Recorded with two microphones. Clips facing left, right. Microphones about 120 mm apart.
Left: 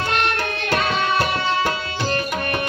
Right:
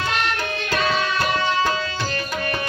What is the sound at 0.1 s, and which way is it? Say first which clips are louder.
Music: left 2 dB; 55° left (ahead or behind).